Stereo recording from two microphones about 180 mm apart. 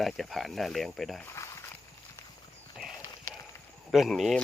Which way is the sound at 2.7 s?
Centre (ahead or behind).